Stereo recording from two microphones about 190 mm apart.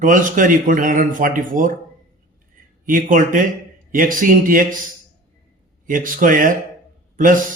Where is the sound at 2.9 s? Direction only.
45° right (ahead or behind).